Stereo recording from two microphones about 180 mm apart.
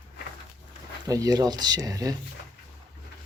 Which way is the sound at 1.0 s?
20° right (ahead or behind).